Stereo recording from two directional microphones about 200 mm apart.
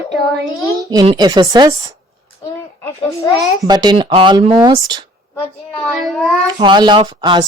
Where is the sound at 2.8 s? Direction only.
15° left (ahead or behind).